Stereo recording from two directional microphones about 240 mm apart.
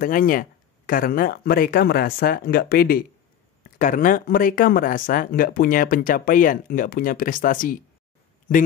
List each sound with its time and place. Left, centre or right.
0.0 s speech: left